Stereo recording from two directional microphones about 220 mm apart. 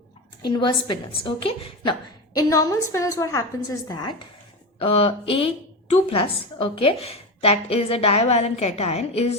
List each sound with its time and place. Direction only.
0.4 s a woman's voice: 20° left (ahead or behind)